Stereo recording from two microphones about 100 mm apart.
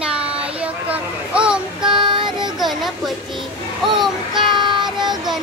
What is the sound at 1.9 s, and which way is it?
Child singing, 50° right (ahead or behind).